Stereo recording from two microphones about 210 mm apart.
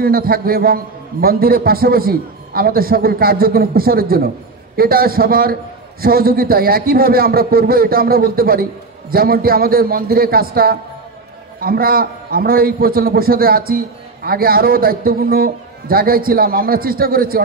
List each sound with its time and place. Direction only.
0.0 s a man's voice: 45° right (ahead or behind)